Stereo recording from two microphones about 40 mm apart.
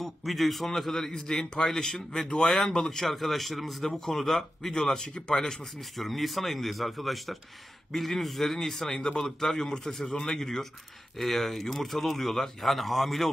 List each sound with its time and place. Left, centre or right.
0.0 s a man's voice: centre
5.9 s a man's voice: centre